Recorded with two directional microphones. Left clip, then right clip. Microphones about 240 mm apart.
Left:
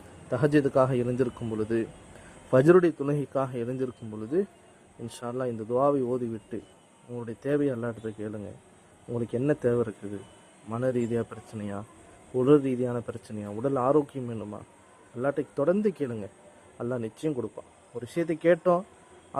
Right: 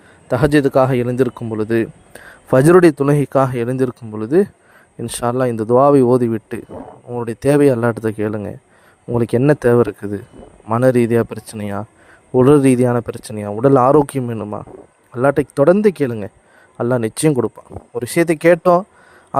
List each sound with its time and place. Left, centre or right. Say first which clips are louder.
0.3 s speech: right 10 dB; right